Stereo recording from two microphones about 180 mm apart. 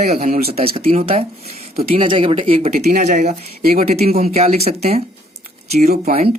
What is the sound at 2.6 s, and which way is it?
Speech, 40° right (ahead or behind).